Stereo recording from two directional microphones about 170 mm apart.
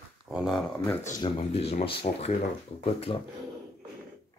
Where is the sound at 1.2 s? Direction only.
35° left (ahead or behind).